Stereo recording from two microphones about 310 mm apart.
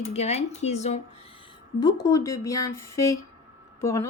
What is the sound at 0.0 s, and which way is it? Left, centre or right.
Speech, left.